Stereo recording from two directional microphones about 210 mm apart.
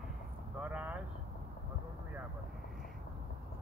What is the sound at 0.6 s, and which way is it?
Speech, 5° right (ahead or behind).